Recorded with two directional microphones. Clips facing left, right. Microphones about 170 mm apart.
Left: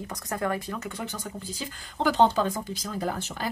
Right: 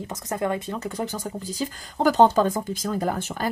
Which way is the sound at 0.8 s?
40° right (ahead or behind).